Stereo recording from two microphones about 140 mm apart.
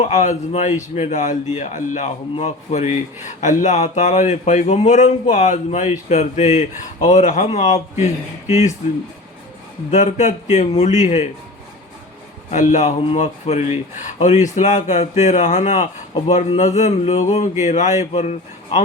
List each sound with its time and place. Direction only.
0.0 s a man's voice: 55° left (ahead or behind)
2.3 s a man's voice: 50° left (ahead or behind)
9.9 s a man's voice: 55° left (ahead or behind)
12.5 s a man's voice: 55° left (ahead or behind)